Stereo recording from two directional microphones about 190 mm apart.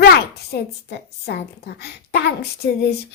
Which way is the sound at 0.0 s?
55° left (ahead or behind).